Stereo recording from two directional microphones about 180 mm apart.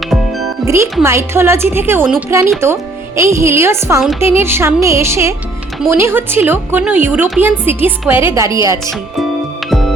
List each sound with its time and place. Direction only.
0.6 s music: 15° right (ahead or behind)
1.0 s a woman's voice: 15° right (ahead or behind)
9.6 s music: centre (ahead or behind)